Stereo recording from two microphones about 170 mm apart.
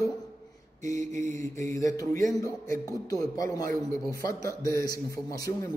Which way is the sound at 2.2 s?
20° left (ahead or behind).